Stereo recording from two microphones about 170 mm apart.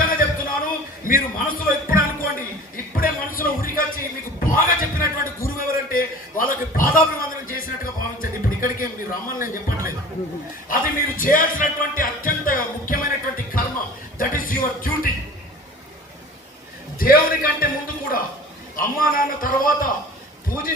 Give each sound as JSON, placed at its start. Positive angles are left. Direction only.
{"t": 0.0, "sound": "a sound", "side_deg": 55}
{"t": 1.0, "sound": "a man's voice", "side_deg": 55}
{"t": 2.7, "sound": "music", "side_deg": 55}
{"t": 4.5, "sound": "a sound", "side_deg": 55}
{"t": 8.2, "sound": "speech", "side_deg": 55}
{"t": 10.7, "sound": "music", "side_deg": 55}
{"t": 17.0, "sound": "a man's voice", "side_deg": 60}